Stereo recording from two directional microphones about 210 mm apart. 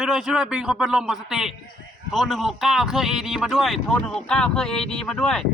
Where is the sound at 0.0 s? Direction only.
5° right (ahead or behind).